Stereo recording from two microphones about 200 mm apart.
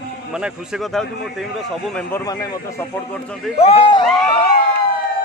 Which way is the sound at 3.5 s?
30° left (ahead or behind).